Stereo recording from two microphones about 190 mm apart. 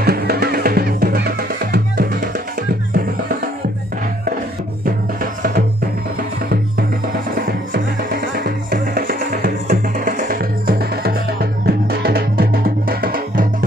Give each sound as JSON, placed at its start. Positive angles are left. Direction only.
{"t": 0.0, "sound": "music", "side_deg": -55}
{"t": 4.8, "sound": "music", "side_deg": -50}
{"t": 7.7, "sound": "music", "side_deg": -55}